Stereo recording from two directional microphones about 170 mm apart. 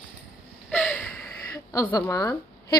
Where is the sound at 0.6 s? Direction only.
10° left (ahead or behind).